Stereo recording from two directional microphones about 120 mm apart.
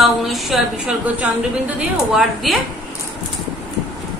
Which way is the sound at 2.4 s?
Centre (ahead or behind).